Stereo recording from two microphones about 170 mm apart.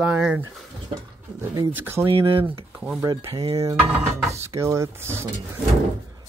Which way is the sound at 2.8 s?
15° right (ahead or behind).